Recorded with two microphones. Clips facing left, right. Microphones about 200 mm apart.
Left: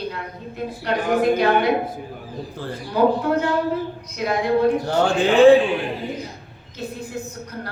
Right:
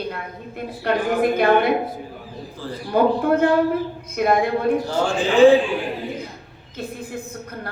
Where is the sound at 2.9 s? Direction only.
55° right (ahead or behind).